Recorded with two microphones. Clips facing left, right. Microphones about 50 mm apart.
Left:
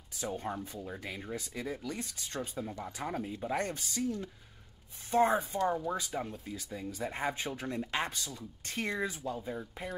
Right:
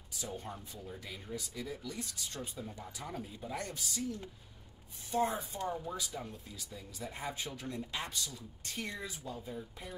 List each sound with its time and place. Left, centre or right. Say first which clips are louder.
0.5 s speech: left 7 dB; left